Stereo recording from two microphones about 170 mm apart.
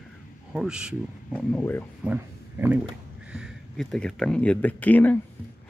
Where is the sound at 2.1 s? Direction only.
10° right (ahead or behind); by 5.2 s 10° left (ahead or behind).